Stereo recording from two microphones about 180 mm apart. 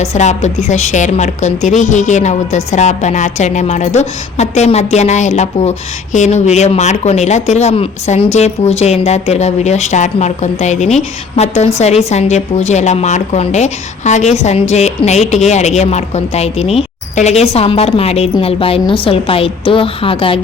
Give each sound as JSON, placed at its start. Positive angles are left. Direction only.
{"t": 0.0, "sound": "a woman's voice", "side_deg": 40}